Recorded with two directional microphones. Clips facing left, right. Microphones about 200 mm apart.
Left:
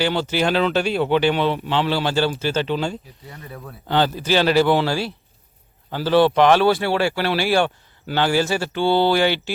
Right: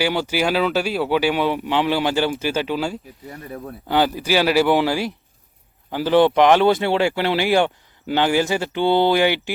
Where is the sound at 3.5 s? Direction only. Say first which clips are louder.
Right 6 dB; 25° right (ahead or behind).